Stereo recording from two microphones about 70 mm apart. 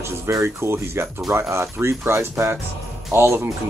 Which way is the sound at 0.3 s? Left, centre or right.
Right.